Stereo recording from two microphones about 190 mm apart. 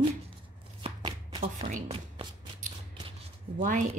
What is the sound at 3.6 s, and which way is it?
Speech, 40° right (ahead or behind).